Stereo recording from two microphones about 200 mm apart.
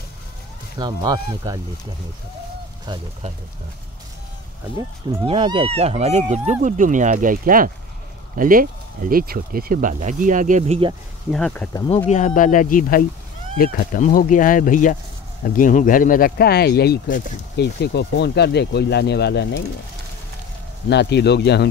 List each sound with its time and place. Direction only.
0.7 s speech: 20° right (ahead or behind)
2.9 s speech: 30° right (ahead or behind)
4.7 s speech: 30° right (ahead or behind)
11.3 s speech: 5° left (ahead or behind)
12.1 s speech: 35° left (ahead or behind); by 19.6 s 55° left (ahead or behind)
20.9 s speech: 55° left (ahead or behind)